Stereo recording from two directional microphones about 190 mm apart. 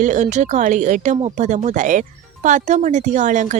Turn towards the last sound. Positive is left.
turn(degrees=-40)  # may be behind; listen again after turning